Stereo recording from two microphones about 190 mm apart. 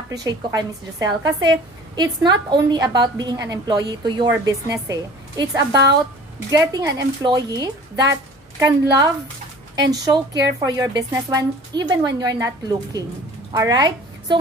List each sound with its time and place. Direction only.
0.1 s a woman's voice: 20° right (ahead or behind)